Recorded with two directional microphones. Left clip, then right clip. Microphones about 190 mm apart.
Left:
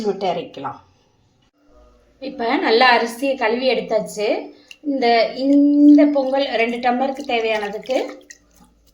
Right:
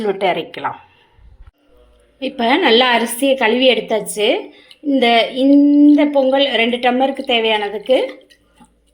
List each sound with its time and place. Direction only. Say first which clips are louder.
0.0 s speech: right 4 dB; 15° right (ahead or behind)
2.2 s a woman's voice: right 5 dB; 35° right (ahead or behind)